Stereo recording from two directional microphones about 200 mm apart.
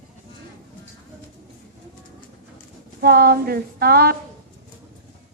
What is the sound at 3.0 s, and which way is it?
Speech, 50° right (ahead or behind).